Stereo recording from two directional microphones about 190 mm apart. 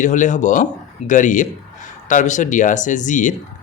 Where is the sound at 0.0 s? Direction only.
40° left (ahead or behind).